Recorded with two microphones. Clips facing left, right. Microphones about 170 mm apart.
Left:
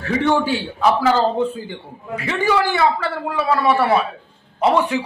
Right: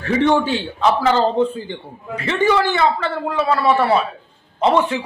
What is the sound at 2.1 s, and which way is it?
A man's voice, 10° left (ahead or behind).